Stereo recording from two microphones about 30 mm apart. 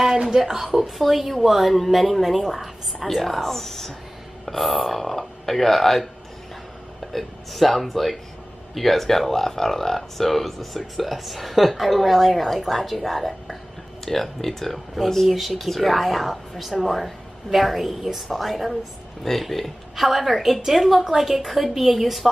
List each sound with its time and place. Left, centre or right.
0.3 s a woman's voice: centre
7.1 s a woman's voice: centre
15.2 s a woman's voice: centre